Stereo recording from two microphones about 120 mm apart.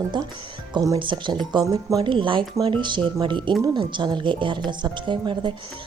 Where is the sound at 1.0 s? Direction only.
40° right (ahead or behind).